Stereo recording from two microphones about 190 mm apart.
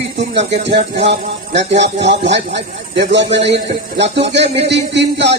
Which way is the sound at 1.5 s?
65° right (ahead or behind).